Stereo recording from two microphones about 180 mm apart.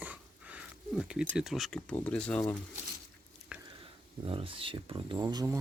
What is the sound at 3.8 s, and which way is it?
Speech, 30° right (ahead or behind).